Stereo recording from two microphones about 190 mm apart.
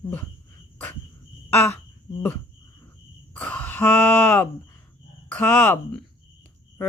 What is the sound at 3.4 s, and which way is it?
Speech, 5° left (ahead or behind).